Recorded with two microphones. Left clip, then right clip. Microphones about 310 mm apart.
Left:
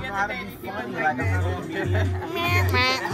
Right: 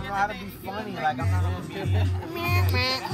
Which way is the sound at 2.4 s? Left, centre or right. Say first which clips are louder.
Left 4 dB; left.